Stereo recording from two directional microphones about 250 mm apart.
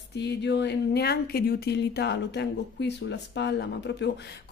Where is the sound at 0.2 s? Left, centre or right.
Left.